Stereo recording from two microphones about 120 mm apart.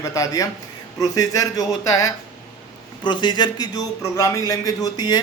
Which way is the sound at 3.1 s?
40° left (ahead or behind).